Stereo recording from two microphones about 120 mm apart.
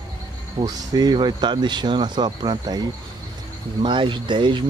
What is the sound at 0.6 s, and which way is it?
Speech, 30° right (ahead or behind).